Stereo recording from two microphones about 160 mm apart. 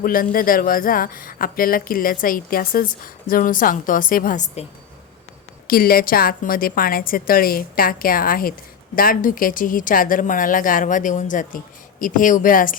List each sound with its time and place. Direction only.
0.0 s speech: 60° left (ahead or behind)
5.6 s speech: 65° left (ahead or behind)